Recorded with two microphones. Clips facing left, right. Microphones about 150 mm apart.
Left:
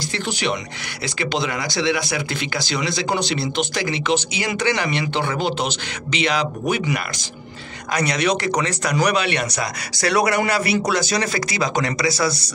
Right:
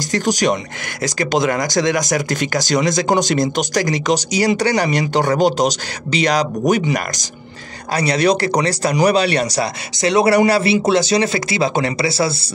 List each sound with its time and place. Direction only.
0.1 s speech: 40° right (ahead or behind)
9.9 s speech: 20° right (ahead or behind)